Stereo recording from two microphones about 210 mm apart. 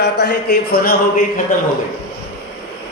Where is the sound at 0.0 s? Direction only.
50° left (ahead or behind).